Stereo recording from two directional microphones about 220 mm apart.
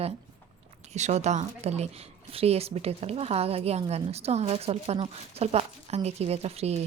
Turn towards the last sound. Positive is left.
turn(degrees=-30)  # may be behind; listen again after turning